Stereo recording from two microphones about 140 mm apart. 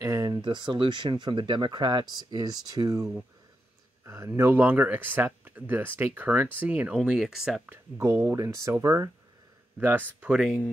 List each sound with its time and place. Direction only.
0.0 s speech: 25° right (ahead or behind); by 7.6 s 5° right (ahead or behind)
7.7 s speech: 25° right (ahead or behind); by 10.5 s 5° right (ahead or behind)